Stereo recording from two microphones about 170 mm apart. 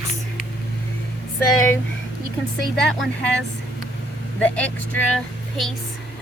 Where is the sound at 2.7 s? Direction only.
5° left (ahead or behind).